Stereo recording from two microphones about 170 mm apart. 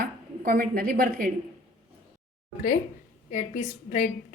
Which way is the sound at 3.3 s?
50° left (ahead or behind).